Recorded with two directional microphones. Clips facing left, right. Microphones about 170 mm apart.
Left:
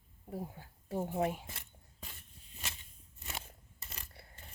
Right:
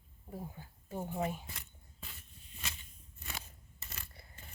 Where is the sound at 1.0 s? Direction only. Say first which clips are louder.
Left 3 dB; 65° left (ahead or behind).